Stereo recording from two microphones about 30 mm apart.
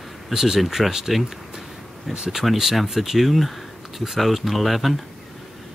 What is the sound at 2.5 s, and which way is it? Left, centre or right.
Speech, centre.